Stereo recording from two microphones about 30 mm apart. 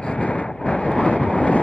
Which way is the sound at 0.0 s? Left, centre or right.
Left.